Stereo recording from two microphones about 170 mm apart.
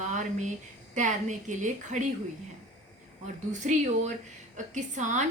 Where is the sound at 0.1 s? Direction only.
45° right (ahead or behind).